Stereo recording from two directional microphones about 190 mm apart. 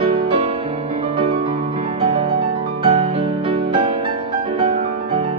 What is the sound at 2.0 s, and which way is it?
Music, 30° right (ahead or behind).